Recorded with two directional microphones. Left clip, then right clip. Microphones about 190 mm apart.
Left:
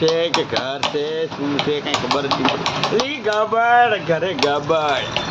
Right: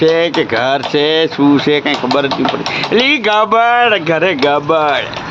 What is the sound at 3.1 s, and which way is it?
Speech, 55° right (ahead or behind).